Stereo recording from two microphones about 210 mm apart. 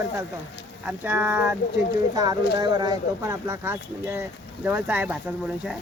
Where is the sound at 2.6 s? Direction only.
20° right (ahead or behind).